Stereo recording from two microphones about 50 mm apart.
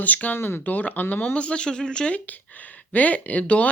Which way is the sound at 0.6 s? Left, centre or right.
Left.